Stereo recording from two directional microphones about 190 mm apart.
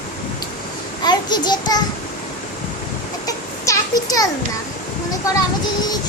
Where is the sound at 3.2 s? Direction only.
15° left (ahead or behind).